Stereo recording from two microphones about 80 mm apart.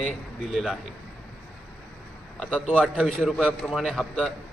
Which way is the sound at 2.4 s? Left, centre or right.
Centre.